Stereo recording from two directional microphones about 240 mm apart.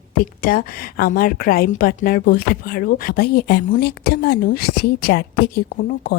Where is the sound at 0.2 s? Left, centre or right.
Left.